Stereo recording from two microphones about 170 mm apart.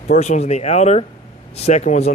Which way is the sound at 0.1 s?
40° left (ahead or behind).